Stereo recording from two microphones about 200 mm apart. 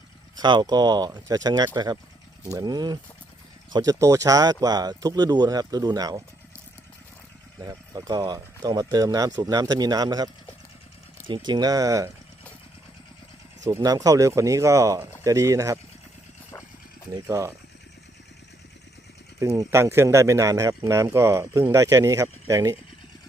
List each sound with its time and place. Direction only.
0.3 s speech: 20° right (ahead or behind)
7.6 s speech: 20° right (ahead or behind)
11.3 s speech: 20° right (ahead or behind)
13.7 s speech: 15° right (ahead or behind)
17.2 s speech: 15° right (ahead or behind)
19.4 s speech: 15° right (ahead or behind)